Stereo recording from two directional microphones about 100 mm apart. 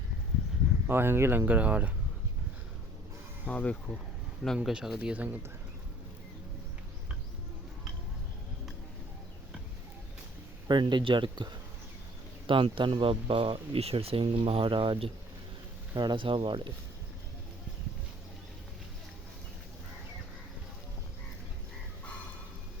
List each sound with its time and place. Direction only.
0.9 s speech: 25° right (ahead or behind)
3.4 s speech: 10° left (ahead or behind)
4.4 s speech: centre (ahead or behind)
10.7 s speech: 50° right (ahead or behind)
12.5 s speech: 60° right (ahead or behind)
16.0 s speech: 50° right (ahead or behind)